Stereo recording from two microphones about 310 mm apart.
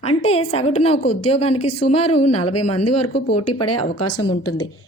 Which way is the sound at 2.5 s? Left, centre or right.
Left.